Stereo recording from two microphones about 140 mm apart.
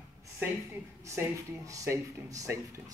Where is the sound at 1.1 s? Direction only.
20° right (ahead or behind).